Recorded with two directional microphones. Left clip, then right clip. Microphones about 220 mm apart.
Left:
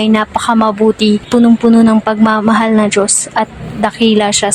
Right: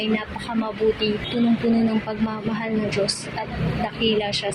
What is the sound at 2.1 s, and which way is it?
A woman's voice, 50° left (ahead or behind).